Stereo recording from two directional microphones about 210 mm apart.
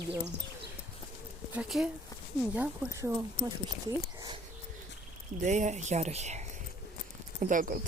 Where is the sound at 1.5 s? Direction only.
5° right (ahead or behind).